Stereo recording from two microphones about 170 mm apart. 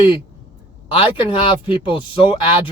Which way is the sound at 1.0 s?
30° left (ahead or behind).